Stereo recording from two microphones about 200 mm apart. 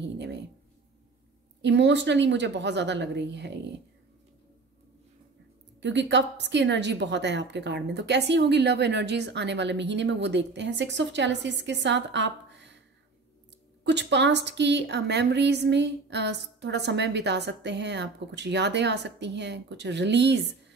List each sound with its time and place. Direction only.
1.6 s a woman's voice: 60° right (ahead or behind)
5.8 s a woman's voice: 60° right (ahead or behind)
13.8 s a woman's voice: 60° right (ahead or behind)